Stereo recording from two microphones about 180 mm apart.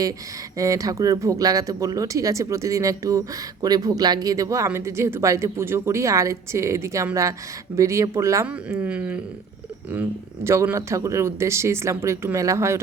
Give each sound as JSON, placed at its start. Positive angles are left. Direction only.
{"t": 0.5, "sound": "speech", "side_deg": -20}